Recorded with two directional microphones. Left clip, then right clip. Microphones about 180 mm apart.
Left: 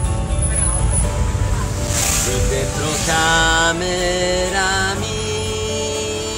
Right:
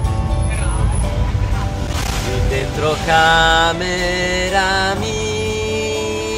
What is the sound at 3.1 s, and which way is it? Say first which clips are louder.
Music: right 4 dB; 15° right (ahead or behind).